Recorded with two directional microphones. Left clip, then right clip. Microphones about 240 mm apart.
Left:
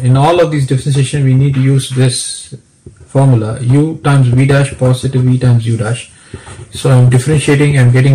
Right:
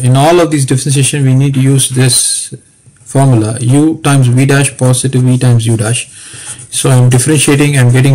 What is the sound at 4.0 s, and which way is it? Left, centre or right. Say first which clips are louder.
Speech: right 2 dB; right.